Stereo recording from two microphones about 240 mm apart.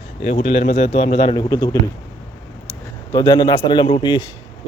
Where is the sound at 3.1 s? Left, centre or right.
Centre.